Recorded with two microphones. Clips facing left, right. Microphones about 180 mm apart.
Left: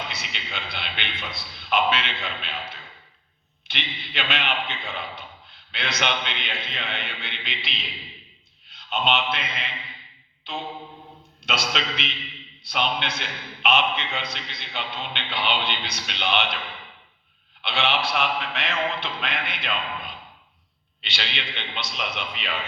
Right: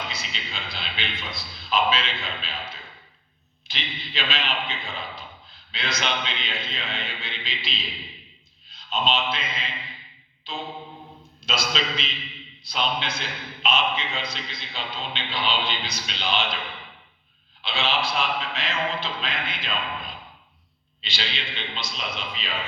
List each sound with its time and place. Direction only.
0.1 s a man's voice: 65° left (ahead or behind)
11.4 s a man's voice: 60° left (ahead or behind)
17.6 s a man's voice: 65° left (ahead or behind)
21.0 s a man's voice: 60° left (ahead or behind)